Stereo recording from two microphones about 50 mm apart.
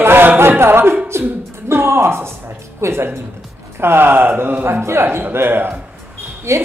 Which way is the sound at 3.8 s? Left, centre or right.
Right.